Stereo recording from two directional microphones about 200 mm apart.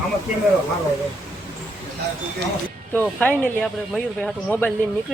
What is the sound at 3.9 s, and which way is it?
Speech, 5° left (ahead or behind).